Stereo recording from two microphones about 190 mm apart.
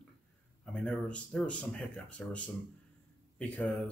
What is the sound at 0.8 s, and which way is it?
Speech, 5° left (ahead or behind).